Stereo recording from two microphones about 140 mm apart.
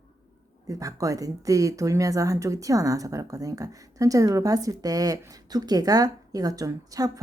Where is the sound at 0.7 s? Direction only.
25° right (ahead or behind).